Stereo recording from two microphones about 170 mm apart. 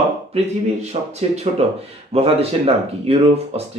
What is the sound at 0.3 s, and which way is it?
Speech, 35° right (ahead or behind).